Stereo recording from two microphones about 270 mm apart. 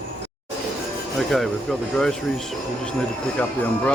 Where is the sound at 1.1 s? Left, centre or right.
Centre.